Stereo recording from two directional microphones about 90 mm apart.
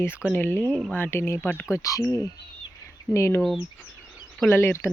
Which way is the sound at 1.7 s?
40° left (ahead or behind).